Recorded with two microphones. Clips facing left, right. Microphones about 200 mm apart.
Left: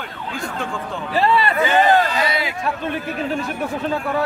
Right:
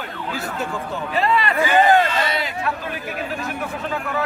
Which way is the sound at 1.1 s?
30° left (ahead or behind).